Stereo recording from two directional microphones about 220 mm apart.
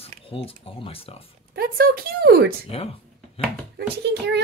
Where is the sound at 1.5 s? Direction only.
45° right (ahead or behind).